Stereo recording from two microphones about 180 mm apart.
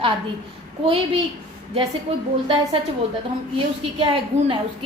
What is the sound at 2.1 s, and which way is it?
Speech, 30° right (ahead or behind).